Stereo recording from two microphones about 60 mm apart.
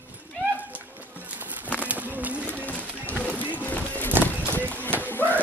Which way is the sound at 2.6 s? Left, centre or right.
Left.